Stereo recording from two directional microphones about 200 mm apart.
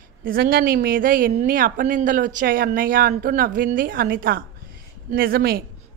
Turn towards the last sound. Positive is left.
turn(degrees=-50)  # may be behind; listen again after turning